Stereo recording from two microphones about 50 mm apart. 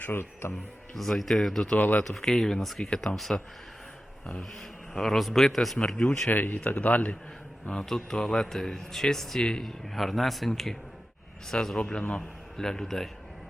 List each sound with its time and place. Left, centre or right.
0.0 s speech: left
0.9 s speech: centre
1.7 s speech: left
2.0 s a man's voice: centre
4.9 s a man's voice: centre
6.3 s speech: left
7.7 s a man's voice: centre
11.8 s a man's voice: centre